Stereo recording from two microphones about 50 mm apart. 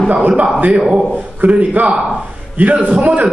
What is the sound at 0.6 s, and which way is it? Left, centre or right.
A man's voice, right.